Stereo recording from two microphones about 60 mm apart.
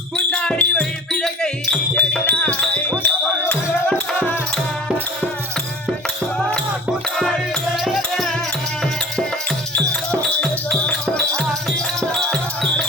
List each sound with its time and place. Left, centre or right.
0.3 s basketball bounce: centre
1.2 s music: centre
2.0 s music: left
3.0 s music: left
10.8 s music: left